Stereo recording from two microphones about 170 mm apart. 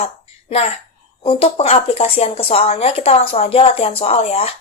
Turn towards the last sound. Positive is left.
turn(degrees=35)  # may be behind; listen again after turning